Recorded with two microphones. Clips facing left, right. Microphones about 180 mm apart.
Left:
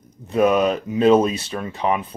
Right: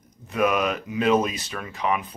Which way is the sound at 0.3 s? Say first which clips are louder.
Left 6 dB; 30° left (ahead or behind).